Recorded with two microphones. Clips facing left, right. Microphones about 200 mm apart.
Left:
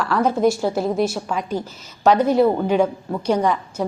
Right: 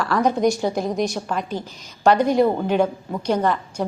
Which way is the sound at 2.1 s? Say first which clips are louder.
Left 1 dB; 10° right (ahead or behind).